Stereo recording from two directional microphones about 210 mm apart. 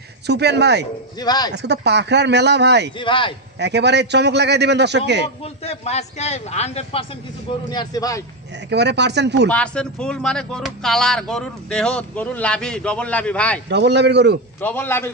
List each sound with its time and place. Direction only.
0.3 s speech: 50° right (ahead or behind)
1.2 s speech: 20° left (ahead or behind)
1.5 s speech: 55° right (ahead or behind)
3.0 s speech: 25° left (ahead or behind)
3.5 s a man's voice: 55° right (ahead or behind)
5.4 s a man's voice: 30° left (ahead or behind)
8.6 s speech: 55° right (ahead or behind)
9.5 s speech: 5° left (ahead or behind)
13.7 s speech: 55° right (ahead or behind)
14.6 s speech: 10° left (ahead or behind)